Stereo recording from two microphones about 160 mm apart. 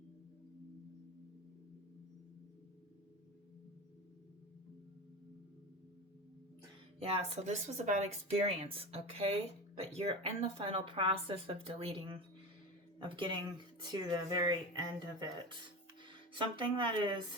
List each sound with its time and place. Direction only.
7.1 s speech: 40° right (ahead or behind); by 15.3 s 25° right (ahead or behind)
16.4 s speech: 30° right (ahead or behind)